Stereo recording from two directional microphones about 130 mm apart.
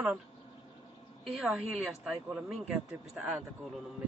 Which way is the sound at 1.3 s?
5° right (ahead or behind).